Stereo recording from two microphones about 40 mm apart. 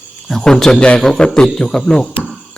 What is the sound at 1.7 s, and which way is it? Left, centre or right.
Speech, centre.